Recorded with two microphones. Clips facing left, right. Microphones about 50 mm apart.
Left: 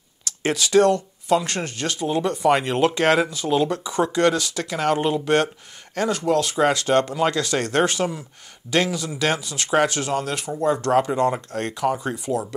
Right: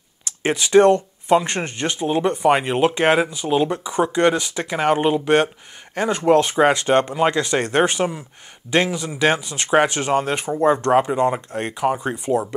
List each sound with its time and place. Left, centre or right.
0.2 s speech: right